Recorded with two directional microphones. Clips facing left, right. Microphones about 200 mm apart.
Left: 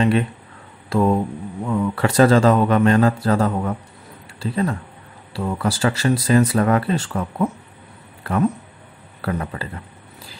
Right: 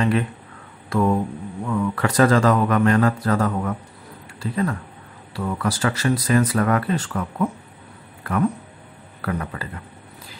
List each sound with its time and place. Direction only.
0.8 s speech: 25° left (ahead or behind)